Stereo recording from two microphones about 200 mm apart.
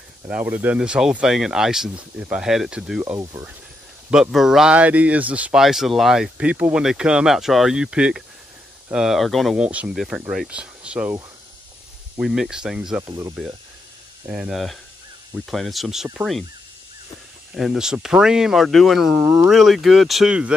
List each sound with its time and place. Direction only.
0.3 s speech: 10° right (ahead or behind)
3.2 s speech: 20° right (ahead or behind)
4.1 s speech: centre (ahead or behind)
12.2 s speech: 5° right (ahead or behind)
13.0 s speech: 20° right (ahead or behind)
14.2 s speech: 5° right (ahead or behind)
17.6 s speech: centre (ahead or behind)